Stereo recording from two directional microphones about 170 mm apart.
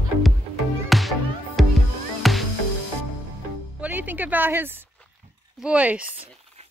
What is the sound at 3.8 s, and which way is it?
Music, 10° right (ahead or behind).